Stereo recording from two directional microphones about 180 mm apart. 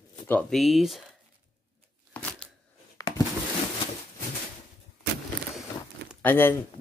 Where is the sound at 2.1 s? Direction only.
5° left (ahead or behind).